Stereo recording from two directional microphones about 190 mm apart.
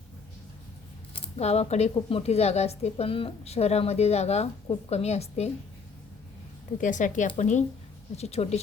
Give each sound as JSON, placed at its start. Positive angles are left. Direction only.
{"t": 1.1, "sound": "speech", "side_deg": 35}
{"t": 6.7, "sound": "speech", "side_deg": 45}